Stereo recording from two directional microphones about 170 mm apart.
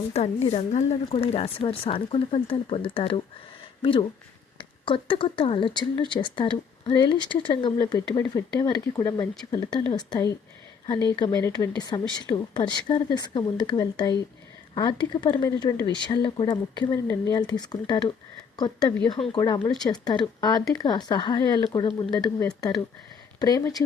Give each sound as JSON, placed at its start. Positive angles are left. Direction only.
{"t": 0.1, "sound": "speech", "side_deg": 40}
{"t": 4.5, "sound": "speech", "side_deg": 30}
{"t": 9.2, "sound": "speech", "side_deg": 0}
{"t": 9.9, "sound": "a woman's voice", "side_deg": 25}